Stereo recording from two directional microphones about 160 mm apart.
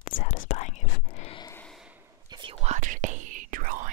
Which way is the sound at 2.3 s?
30° right (ahead or behind).